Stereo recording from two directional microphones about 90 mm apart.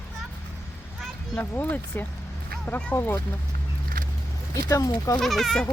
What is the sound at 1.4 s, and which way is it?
Speech, 20° left (ahead or behind).